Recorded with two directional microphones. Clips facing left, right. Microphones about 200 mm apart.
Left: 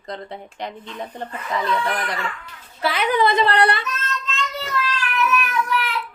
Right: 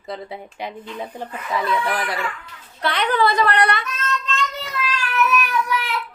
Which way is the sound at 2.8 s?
5° left (ahead or behind).